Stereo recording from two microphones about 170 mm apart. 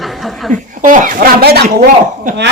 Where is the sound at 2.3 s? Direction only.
45° right (ahead or behind).